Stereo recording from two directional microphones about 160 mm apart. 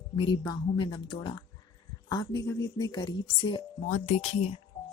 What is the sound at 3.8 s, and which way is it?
Speech, 45° left (ahead or behind).